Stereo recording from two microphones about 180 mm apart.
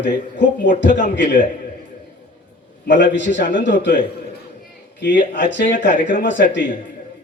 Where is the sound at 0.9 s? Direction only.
45° left (ahead or behind).